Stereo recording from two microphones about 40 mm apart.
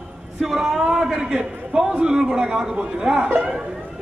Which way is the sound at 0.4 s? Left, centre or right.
Centre.